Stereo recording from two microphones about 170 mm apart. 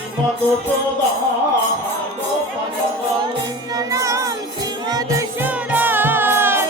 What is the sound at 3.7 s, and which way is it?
Music, 20° right (ahead or behind).